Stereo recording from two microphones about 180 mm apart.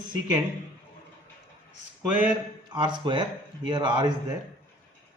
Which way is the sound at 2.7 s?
25° right (ahead or behind).